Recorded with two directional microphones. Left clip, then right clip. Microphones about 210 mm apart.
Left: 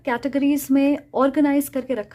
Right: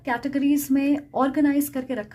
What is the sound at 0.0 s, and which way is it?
Speech, 30° left (ahead or behind).